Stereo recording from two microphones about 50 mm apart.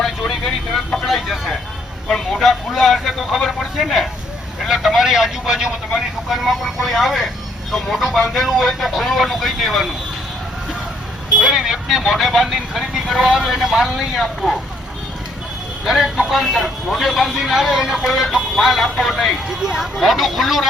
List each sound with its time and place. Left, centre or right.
0.0 s a sound: centre
0.9 s vehicle: centre
2.4 s speech: centre
11.3 s speech: centre
15.8 s speech: centre